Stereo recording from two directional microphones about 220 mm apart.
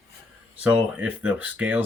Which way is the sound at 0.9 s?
5° right (ahead or behind).